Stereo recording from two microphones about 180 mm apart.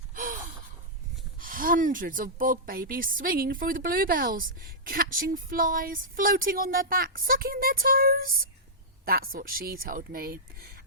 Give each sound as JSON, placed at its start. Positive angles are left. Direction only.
{"t": 0.1, "sound": "gasp", "side_deg": -50}
{"t": 1.4, "sound": "a woman's voice", "side_deg": -50}